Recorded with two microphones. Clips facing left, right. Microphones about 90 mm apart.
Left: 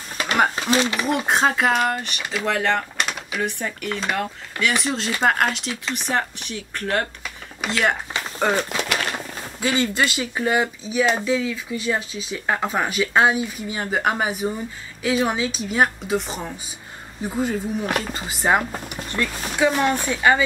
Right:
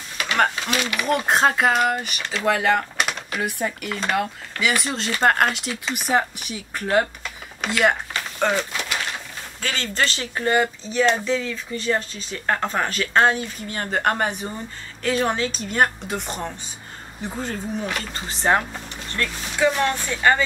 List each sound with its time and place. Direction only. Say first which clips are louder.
0.7 s speech: left 4 dB; 30° left (ahead or behind)
1.0 s speech: right 1 dB; centre (ahead or behind)
7.2 s a sound: even; centre (ahead or behind)
9.6 s speech: left 4 dB; 15° left (ahead or behind)